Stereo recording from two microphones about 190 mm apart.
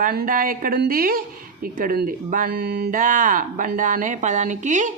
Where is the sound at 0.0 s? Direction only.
50° right (ahead or behind).